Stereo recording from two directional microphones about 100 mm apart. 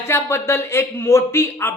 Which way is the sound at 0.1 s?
25° left (ahead or behind).